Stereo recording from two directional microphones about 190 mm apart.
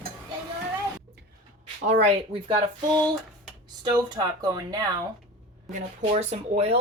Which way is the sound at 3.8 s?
20° right (ahead or behind).